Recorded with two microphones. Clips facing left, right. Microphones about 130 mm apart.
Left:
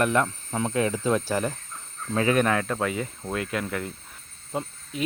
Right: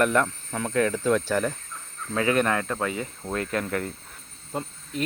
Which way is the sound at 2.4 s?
10° left (ahead or behind).